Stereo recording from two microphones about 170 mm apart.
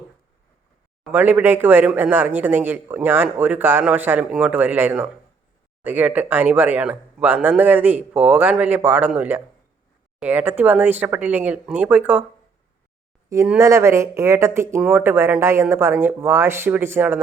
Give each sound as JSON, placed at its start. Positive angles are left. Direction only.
{"t": 1.0, "sound": "speech", "side_deg": -10}
{"t": 13.3, "sound": "speech", "side_deg": -15}